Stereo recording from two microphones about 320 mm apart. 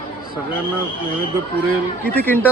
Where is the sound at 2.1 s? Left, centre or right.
Centre.